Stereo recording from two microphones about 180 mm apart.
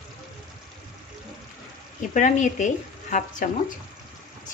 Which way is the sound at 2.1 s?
45° left (ahead or behind).